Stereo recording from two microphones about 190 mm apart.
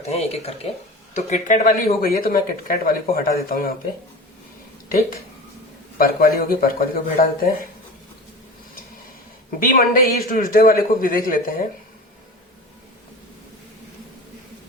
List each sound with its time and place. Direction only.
0.1 s speech: 35° left (ahead or behind); by 3.8 s 50° left (ahead or behind)
6.0 s speech: 50° left (ahead or behind)
9.5 s speech: 45° left (ahead or behind)